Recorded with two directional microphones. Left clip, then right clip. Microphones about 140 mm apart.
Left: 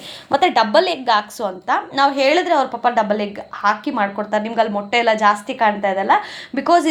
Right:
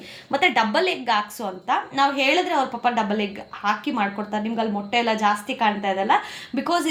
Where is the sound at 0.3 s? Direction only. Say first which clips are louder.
Left 5 dB; 30° left (ahead or behind).